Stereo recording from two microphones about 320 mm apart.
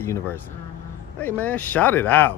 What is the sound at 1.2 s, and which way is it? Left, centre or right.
Speech, centre.